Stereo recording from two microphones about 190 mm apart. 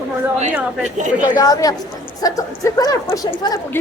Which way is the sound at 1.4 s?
20° left (ahead or behind).